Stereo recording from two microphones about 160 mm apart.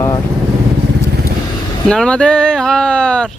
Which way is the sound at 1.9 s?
5° left (ahead or behind).